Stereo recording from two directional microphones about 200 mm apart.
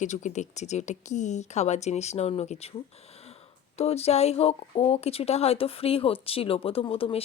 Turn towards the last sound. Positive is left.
turn(degrees=30)  # may be behind; listen again after turning